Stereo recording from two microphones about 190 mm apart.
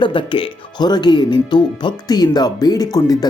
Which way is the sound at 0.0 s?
25° left (ahead or behind).